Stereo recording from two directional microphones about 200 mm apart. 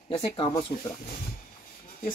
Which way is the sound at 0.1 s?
35° left (ahead or behind).